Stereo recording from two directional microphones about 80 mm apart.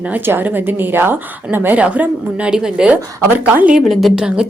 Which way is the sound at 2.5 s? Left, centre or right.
Centre.